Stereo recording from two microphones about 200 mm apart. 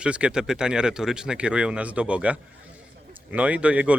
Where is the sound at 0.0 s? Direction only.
5° right (ahead or behind).